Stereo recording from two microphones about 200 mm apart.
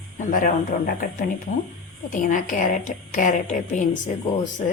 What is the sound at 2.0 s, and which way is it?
A woman's voice, 40° left (ahead or behind).